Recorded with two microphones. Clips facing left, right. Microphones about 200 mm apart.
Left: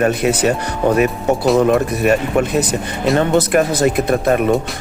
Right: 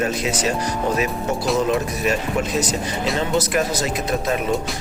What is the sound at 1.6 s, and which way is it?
Speech, 60° left (ahead or behind).